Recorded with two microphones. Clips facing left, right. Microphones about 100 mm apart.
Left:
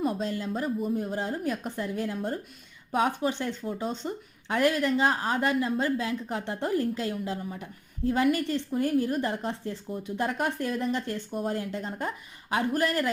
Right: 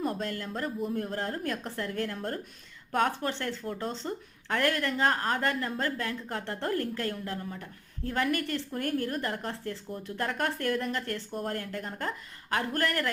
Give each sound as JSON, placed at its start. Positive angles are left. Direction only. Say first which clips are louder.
{"t": 0.0, "sound": "speech", "louder": "left 3 dB", "side_deg": 15}